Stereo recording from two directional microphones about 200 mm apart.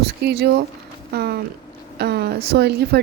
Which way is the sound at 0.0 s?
55° right (ahead or behind).